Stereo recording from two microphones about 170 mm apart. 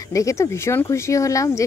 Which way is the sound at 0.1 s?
20° left (ahead or behind).